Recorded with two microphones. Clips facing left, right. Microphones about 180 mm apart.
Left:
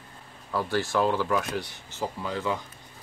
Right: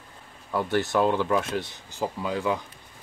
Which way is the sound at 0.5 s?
20° right (ahead or behind).